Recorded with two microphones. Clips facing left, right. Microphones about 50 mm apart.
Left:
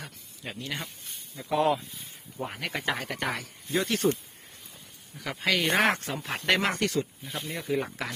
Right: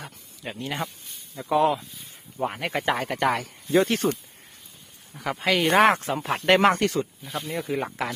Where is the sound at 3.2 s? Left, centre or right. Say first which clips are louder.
Right 9 dB; right.